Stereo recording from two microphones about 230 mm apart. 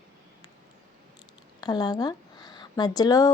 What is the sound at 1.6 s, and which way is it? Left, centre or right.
Speech, centre.